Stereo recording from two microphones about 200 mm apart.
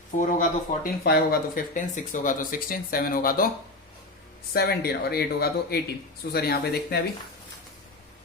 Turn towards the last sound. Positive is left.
turn(degrees=55)  # may be behind; listen again after turning